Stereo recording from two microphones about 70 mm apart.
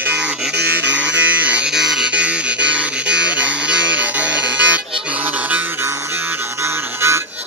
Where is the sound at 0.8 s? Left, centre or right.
Right.